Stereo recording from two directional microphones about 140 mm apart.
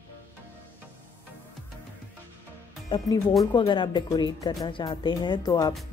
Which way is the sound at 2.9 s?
35° left (ahead or behind).